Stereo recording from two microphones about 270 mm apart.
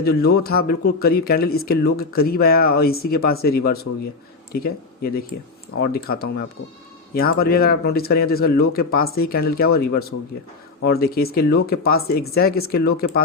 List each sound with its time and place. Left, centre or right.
0.0 s speech: left